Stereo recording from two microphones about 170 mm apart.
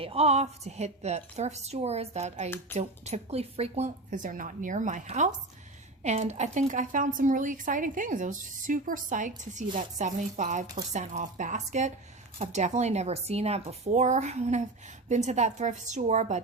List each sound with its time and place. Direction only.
0.0 s a woman's voice: 35° right (ahead or behind)